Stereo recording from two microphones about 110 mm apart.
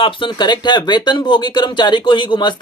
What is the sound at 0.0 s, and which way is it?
Speech, 50° left (ahead or behind).